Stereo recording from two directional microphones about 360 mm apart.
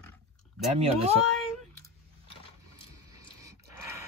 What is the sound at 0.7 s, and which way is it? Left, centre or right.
Speech, centre.